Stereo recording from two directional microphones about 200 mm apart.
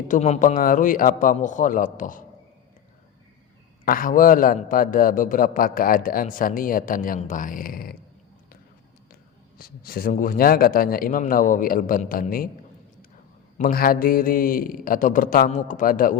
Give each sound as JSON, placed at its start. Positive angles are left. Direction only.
{"t": 0.1, "sound": "a man's voice", "side_deg": 35}
{"t": 3.8, "sound": "a man's voice", "side_deg": 45}
{"t": 9.6, "sound": "a man's voice", "side_deg": 50}
{"t": 13.6, "sound": "a man's voice", "side_deg": 45}